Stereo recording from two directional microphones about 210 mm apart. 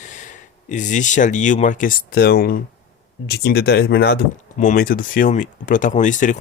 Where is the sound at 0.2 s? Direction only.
35° left (ahead or behind).